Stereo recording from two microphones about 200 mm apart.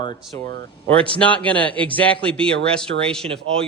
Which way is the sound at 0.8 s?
5° left (ahead or behind).